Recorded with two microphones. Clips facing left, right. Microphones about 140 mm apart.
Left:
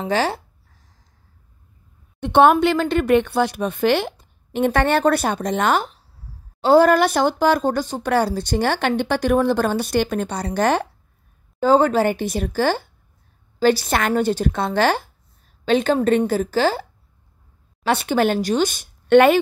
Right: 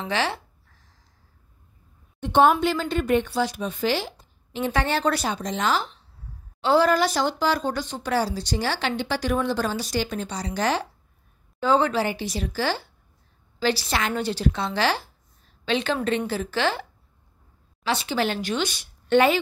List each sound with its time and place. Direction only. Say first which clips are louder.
0.0 s a woman's voice: left 5 dB; 40° left (ahead or behind)
2.1 s speech: left 4 dB; 70° left (ahead or behind)
6.6 s a woman's voice: left 6 dB; 45° left (ahead or behind)
6.9 s speech: left 5 dB; 60° left (ahead or behind)
11.6 s a woman's voice: left 6 dB; 45° left (ahead or behind)
17.8 s a woman's voice: left 6 dB; 55° left (ahead or behind)
19.0 s speech: left 6 dB; 60° left (ahead or behind)